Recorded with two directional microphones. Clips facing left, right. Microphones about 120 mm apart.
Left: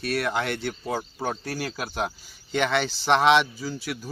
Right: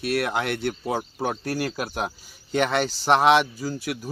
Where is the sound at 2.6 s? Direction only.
45° right (ahead or behind).